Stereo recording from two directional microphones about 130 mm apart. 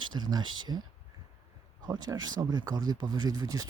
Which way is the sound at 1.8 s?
30° right (ahead or behind).